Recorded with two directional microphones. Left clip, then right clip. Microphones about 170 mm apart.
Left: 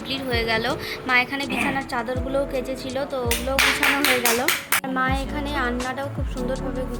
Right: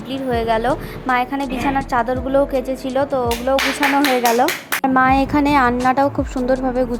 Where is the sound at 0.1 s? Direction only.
30° right (ahead or behind).